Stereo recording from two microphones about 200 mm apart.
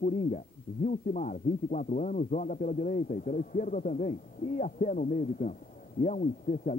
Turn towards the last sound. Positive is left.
turn(degrees=40)  # may be behind; listen again after turning